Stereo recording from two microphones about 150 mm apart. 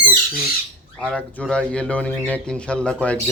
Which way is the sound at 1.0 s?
10° left (ahead or behind).